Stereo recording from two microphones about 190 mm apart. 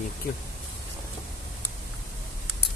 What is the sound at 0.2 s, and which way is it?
Speech, 50° left (ahead or behind).